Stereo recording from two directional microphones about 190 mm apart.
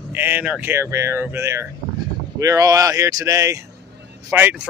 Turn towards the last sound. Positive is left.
turn(degrees=-10)  # may be behind; listen again after turning